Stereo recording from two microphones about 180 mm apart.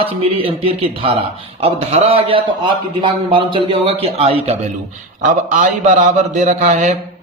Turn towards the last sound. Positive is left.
turn(degrees=-40)  # may be behind; listen again after turning